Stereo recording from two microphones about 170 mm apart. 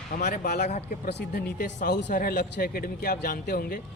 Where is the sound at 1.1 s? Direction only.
70° left (ahead or behind).